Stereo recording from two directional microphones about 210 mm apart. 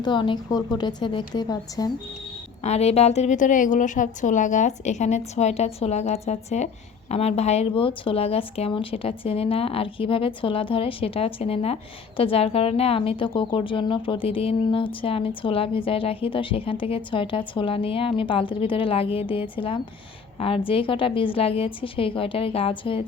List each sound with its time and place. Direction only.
0.0 s speech: 20° left (ahead or behind)
2.6 s a woman's voice: 30° left (ahead or behind)